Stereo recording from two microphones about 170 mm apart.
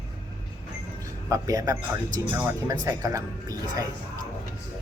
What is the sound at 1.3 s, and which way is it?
Speech, 20° right (ahead or behind).